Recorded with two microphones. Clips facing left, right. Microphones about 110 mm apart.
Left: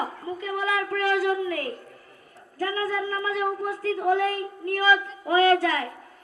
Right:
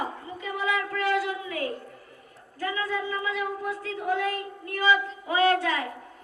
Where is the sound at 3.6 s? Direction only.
40° left (ahead or behind).